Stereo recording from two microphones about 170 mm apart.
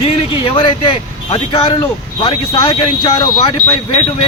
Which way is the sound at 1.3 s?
35° left (ahead or behind).